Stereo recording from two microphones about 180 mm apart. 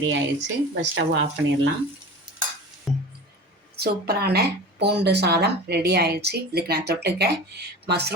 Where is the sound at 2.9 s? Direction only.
Centre (ahead or behind).